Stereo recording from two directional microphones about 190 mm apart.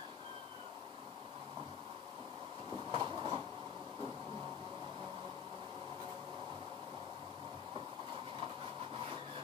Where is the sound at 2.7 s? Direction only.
25° right (ahead or behind).